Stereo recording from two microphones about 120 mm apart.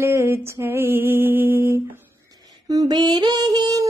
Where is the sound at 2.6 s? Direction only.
30° right (ahead or behind).